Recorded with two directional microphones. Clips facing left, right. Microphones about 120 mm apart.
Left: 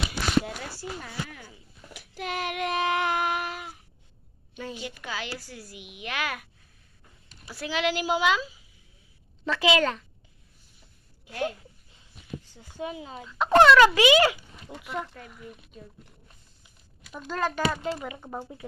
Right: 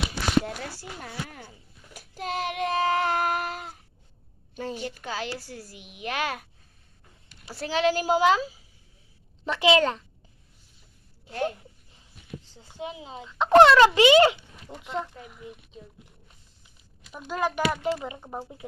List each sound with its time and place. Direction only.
0.4 s a sound: 45° right (ahead or behind)
4.5 s a woman's voice: 40° right (ahead or behind)
9.4 s speech: 25° right (ahead or behind)
11.3 s speech: 30° right (ahead or behind)
12.5 s speech: 25° right (ahead or behind)
17.0 s speech: 5° right (ahead or behind)